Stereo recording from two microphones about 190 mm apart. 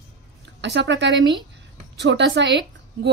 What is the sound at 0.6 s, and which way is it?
A woman's voice, 70° right (ahead or behind).